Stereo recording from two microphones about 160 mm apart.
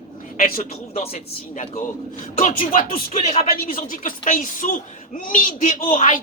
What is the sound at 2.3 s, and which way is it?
Speech, 55° left (ahead or behind).